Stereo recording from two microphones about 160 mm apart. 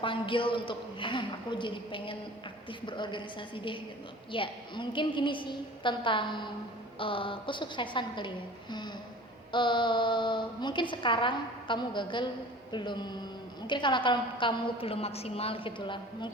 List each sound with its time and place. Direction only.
0.0 s a woman's voice: 30° left (ahead or behind)
8.7 s a sound: 25° left (ahead or behind)
9.5 s a woman's voice: 30° left (ahead or behind)